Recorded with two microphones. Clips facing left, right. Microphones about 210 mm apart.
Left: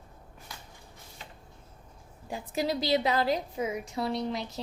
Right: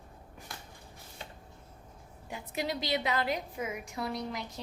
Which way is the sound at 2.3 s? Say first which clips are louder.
Left 5 dB; 35° left (ahead or behind).